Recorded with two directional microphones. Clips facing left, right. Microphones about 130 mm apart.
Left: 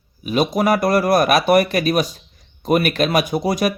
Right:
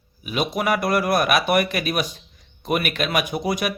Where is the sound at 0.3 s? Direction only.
40° left (ahead or behind).